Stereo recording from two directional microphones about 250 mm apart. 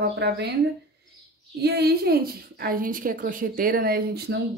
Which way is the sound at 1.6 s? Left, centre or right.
Right.